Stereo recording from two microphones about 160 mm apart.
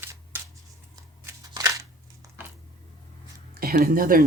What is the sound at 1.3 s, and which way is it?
Scissors, 20° right (ahead or behind).